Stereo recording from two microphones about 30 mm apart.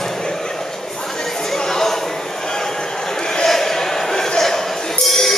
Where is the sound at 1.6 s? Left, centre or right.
Centre.